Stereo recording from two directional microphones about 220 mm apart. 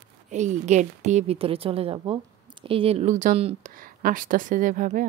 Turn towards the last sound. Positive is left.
turn(degrees=-35)  # may be behind; listen again after turning